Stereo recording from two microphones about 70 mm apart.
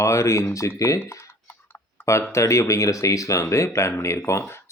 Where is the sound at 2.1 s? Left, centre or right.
Left.